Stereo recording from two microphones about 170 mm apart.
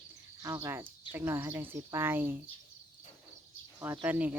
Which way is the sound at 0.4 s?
15° right (ahead or behind).